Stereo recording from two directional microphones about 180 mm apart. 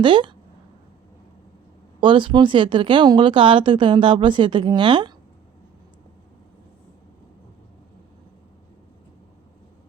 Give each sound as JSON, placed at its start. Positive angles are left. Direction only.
{"t": 0.0, "sound": "speech", "side_deg": -25}
{"t": 2.0, "sound": "speech", "side_deg": -25}